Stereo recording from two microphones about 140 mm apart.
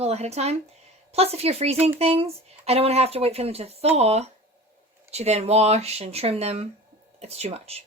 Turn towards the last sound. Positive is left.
turn(degrees=-45)  # may be behind; listen again after turning